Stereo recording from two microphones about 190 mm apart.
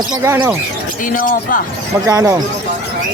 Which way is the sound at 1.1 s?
45° left (ahead or behind).